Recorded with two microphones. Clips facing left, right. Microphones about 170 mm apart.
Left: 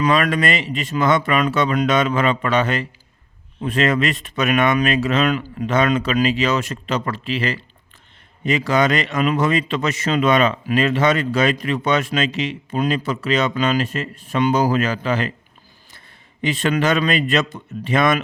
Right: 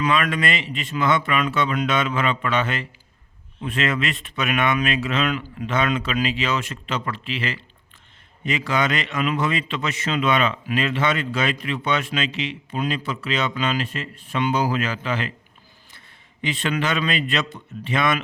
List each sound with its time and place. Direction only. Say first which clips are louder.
0.0 s speech: left 4 dB; 40° left (ahead or behind)
16.4 s a man's voice: left 5 dB; 40° left (ahead or behind)